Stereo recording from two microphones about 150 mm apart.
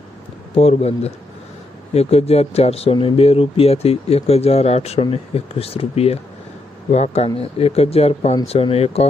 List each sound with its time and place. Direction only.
0.5 s speech: 40° left (ahead or behind)